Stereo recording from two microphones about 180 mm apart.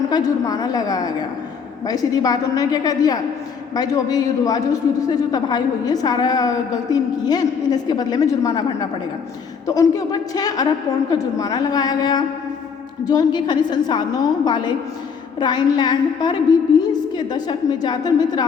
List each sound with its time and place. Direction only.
0.1 s a man's voice: 20° left (ahead or behind)